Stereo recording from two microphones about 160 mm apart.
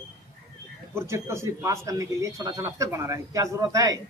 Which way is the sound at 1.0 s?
15° right (ahead or behind).